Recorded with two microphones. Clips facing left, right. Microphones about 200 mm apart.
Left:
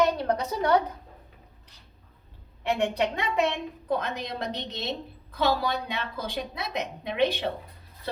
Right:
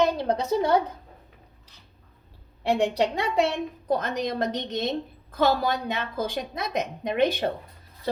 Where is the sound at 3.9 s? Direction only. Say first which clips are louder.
Right 3 dB; 45° right (ahead or behind).